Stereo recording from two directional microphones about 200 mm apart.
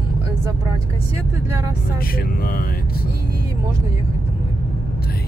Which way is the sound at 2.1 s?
45° left (ahead or behind).